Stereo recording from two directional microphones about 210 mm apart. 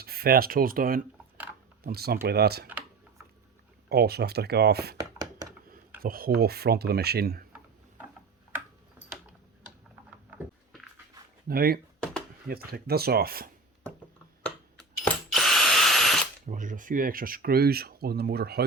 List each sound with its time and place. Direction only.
0.0 s speech: 45° right (ahead or behind)
3.8 s speech: 50° right (ahead or behind)
5.2 s a sound: 15° right (ahead or behind)
6.0 s speech: 45° right (ahead or behind)
11.4 s speech: 45° right (ahead or behind)
14.4 s drill: 5° left (ahead or behind)
16.5 s speech: 40° right (ahead or behind)